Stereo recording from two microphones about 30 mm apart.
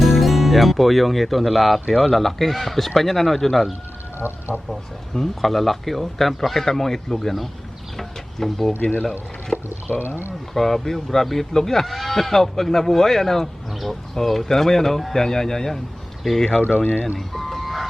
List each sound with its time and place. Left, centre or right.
0.0 s speech: centre
5.1 s speech: centre
7.9 s a sound: centre
8.8 s speech: left
9.5 s speech: left
10.5 s speech: centre
11.9 s speech: centre
13.7 s speech: centre
14.4 s speech: centre
16.6 s speech: left
17.2 s chicken: centre